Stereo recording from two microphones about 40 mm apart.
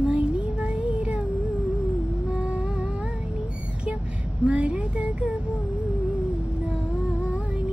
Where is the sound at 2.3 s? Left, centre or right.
Right.